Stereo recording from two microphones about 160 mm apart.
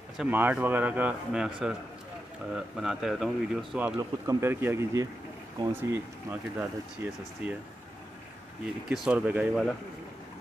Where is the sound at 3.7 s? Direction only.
15° right (ahead or behind).